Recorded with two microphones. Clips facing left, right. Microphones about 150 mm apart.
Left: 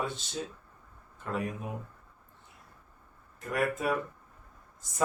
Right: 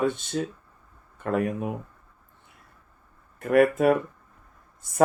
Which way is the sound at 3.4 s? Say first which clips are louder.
Right 11 dB; 60° right (ahead or behind).